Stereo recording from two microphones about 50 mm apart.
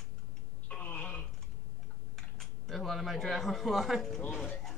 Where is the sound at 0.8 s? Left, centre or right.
Left.